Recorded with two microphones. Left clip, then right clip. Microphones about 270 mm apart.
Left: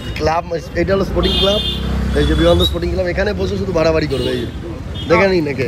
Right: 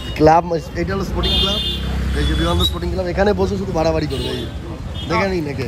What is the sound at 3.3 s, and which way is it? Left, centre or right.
Speech, right.